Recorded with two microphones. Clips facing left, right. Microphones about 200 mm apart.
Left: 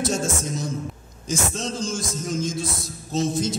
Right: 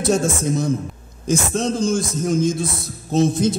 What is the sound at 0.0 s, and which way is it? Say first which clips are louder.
A man's voice: right 6 dB; 60° right (ahead or behind).